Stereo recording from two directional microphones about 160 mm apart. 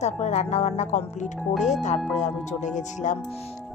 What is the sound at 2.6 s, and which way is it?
Speech, 50° left (ahead or behind).